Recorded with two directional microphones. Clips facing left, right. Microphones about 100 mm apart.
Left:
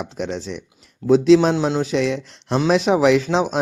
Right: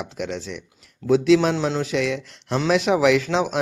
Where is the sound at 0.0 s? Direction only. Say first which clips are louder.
Left 3 dB; 25° left (ahead or behind).